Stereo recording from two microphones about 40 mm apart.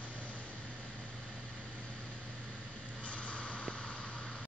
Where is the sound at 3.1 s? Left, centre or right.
Left.